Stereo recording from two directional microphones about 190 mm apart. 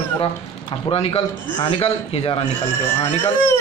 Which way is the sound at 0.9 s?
30° left (ahead or behind).